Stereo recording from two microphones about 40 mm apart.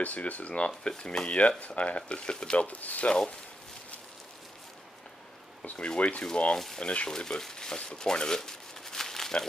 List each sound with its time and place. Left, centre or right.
0.0 s speech: left
0.5 s speech: left
1.6 s speech: left
2.1 s speech: left
2.8 s speech: left
3.1 s speech: left
5.8 s speech: left
6.3 s speech: left
7.1 s speech: centre
8.4 s crumpling: centre